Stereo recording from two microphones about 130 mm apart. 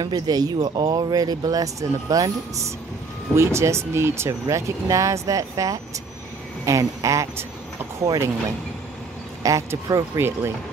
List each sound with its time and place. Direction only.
0.0 s speech: 30° right (ahead or behind)
9.4 s speech: 25° right (ahead or behind)